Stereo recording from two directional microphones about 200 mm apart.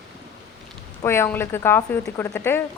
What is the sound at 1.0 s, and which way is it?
Speech, 10° left (ahead or behind).